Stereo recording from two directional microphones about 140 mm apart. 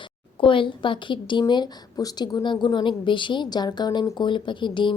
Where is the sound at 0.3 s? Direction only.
40° left (ahead or behind).